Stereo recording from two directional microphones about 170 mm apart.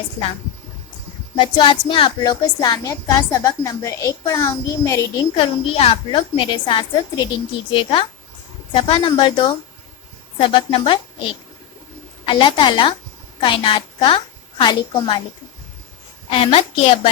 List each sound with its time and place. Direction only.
1.4 s speech: 30° left (ahead or behind)
5.4 s a woman's voice: 35° left (ahead or behind)
12.2 s speech: 30° left (ahead or behind)
16.3 s a woman's voice: 35° left (ahead or behind)